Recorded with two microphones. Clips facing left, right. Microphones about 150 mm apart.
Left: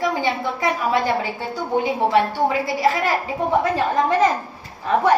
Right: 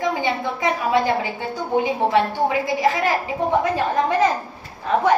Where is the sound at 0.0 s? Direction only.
20° right (ahead or behind).